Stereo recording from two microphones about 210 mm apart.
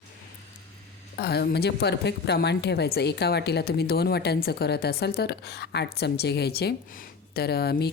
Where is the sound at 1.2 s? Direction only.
50° left (ahead or behind).